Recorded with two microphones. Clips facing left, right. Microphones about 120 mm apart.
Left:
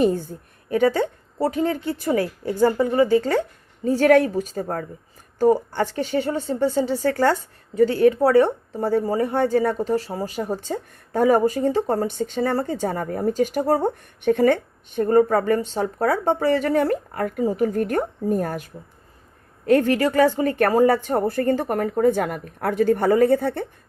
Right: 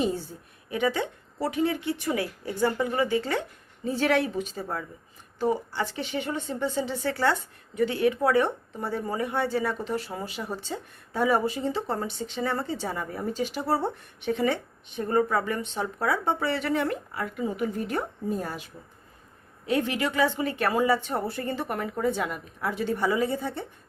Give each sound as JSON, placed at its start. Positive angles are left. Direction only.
{"t": 0.0, "sound": "speech", "side_deg": 50}
{"t": 17.4, "sound": "speech", "side_deg": 40}